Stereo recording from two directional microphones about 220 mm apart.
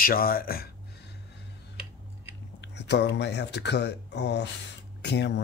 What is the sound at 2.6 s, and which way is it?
Speech, 50° left (ahead or behind).